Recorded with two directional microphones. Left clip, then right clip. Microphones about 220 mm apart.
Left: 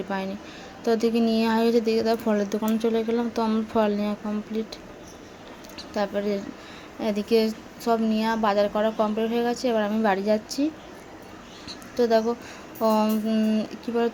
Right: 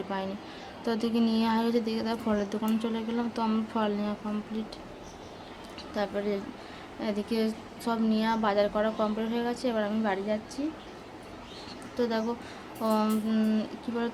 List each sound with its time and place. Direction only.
0.1 s a woman's voice: 15° left (ahead or behind)
5.9 s a woman's voice: 15° left (ahead or behind)
11.9 s a woman's voice: 20° left (ahead or behind)